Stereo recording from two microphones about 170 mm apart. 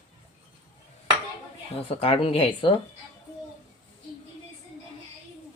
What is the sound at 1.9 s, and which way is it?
Speech, 35° left (ahead or behind).